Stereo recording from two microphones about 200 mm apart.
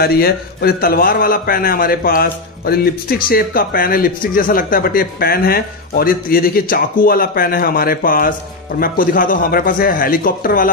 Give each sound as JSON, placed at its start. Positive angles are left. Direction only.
{"t": 0.0, "sound": "a man's voice", "side_deg": 50}